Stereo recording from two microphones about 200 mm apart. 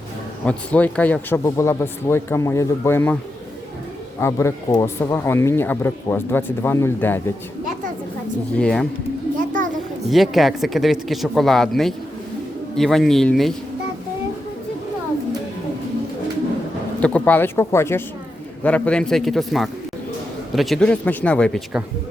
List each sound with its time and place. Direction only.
0.4 s speech: 5° left (ahead or behind)
4.2 s speech: 15° left (ahead or behind)
8.5 s speech: 5° left (ahead or behind)
10.1 s speech: centre (ahead or behind)
17.0 s speech: 5° left (ahead or behind)